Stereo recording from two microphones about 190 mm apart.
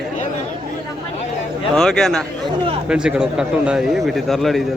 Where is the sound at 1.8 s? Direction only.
5° left (ahead or behind).